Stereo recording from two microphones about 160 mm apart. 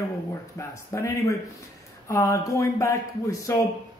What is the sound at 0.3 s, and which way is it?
A man's voice, 15° left (ahead or behind).